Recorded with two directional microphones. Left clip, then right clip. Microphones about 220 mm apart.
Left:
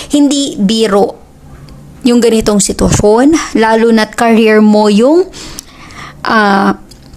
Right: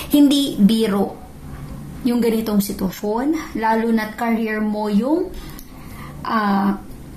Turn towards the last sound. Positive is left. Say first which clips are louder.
# left 11 dB
turn(degrees=50)  # may be behind; listen again after turning